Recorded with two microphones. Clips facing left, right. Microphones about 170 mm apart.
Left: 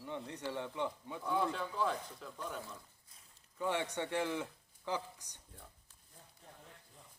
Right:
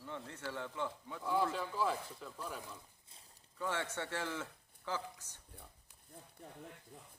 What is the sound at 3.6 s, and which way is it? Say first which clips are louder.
Speech: left 3 dB; 15° left (ahead or behind).